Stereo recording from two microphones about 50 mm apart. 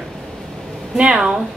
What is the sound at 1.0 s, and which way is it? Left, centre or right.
Speech, right.